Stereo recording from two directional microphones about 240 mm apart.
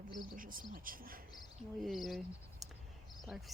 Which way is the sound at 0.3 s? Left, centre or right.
Right.